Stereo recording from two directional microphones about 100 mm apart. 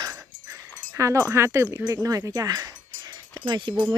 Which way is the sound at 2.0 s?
35° right (ahead or behind).